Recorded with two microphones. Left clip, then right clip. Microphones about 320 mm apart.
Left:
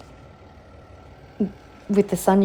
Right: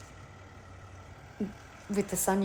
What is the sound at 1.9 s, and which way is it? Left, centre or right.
Speech, left.